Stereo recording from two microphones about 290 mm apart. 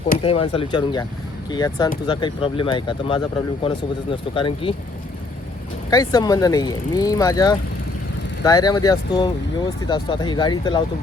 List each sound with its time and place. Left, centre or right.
0.2 s speech: centre
5.9 s speech: centre